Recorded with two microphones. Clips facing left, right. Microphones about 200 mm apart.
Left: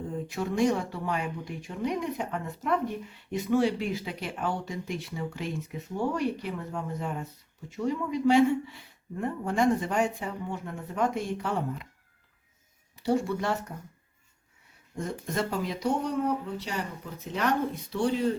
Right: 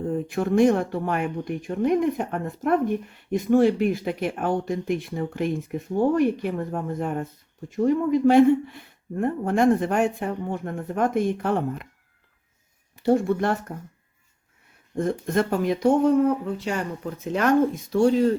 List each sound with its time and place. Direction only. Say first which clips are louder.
0.1 s speech: right 9 dB; 55° right (ahead or behind)
13.0 s speech: right 6 dB; 50° right (ahead or behind)
14.9 s speech: right 8 dB; 55° right (ahead or behind)